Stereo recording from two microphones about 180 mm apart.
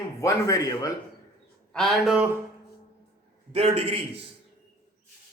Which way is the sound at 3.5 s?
35° right (ahead or behind).